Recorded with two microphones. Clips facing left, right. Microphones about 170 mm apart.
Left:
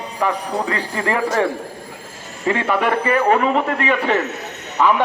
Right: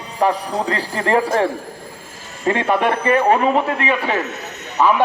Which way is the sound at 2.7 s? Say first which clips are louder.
Right 2 dB; 35° right (ahead or behind).